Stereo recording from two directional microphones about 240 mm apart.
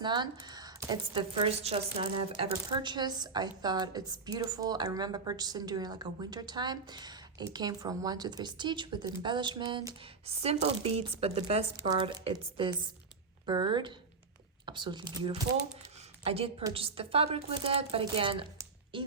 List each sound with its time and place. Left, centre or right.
0.0 s a woman's voice: centre